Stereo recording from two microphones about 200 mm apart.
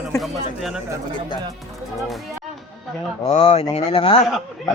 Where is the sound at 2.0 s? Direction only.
Centre (ahead or behind).